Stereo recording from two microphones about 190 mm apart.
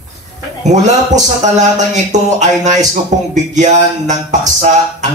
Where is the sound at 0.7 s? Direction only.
40° right (ahead or behind).